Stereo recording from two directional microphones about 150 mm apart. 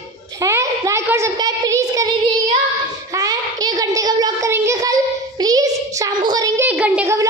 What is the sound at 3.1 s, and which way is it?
Child singing, 25° right (ahead or behind).